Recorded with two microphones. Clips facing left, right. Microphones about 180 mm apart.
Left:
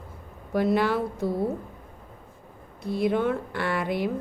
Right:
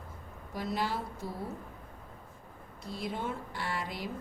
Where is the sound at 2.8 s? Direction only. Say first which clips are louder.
Left 13 dB; 60° left (ahead or behind).